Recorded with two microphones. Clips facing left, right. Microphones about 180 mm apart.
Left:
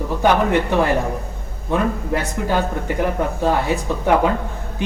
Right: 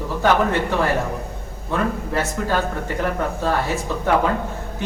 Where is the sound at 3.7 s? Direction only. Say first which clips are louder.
Left 3 dB; 15° left (ahead or behind).